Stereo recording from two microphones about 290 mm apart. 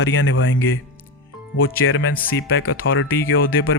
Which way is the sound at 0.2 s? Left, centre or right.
Left.